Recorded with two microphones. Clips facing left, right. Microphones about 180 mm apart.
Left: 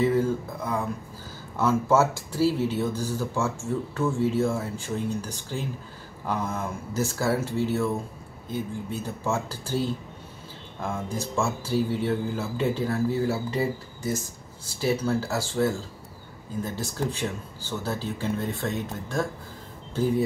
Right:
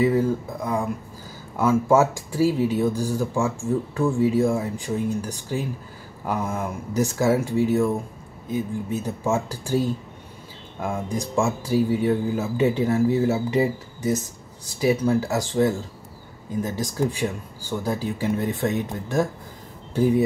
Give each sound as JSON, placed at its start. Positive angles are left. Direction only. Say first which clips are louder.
{"t": 0.0, "sound": "speech", "louder": "right 3 dB", "side_deg": -15}